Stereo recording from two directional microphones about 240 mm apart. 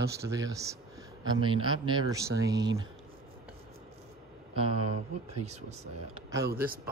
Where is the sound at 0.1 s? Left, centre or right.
Centre.